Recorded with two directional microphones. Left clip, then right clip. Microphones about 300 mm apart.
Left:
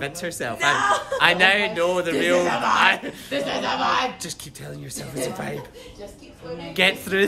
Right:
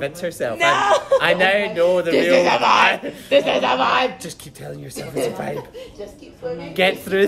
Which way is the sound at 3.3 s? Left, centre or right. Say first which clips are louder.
Right 9 dB; right.